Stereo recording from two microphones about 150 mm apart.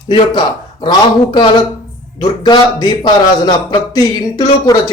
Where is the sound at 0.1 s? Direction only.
35° left (ahead or behind).